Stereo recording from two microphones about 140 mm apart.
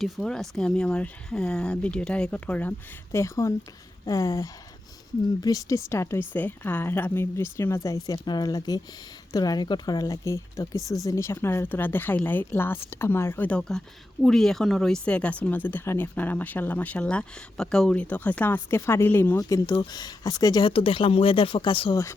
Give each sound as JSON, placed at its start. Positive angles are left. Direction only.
{"t": 0.0, "sound": "speech", "side_deg": 5}